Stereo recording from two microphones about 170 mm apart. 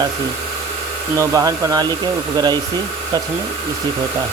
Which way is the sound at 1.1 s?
20° right (ahead or behind).